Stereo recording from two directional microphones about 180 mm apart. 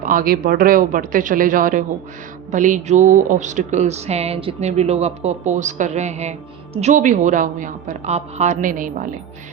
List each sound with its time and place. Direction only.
0.0 s a woman's voice: 50° right (ahead or behind)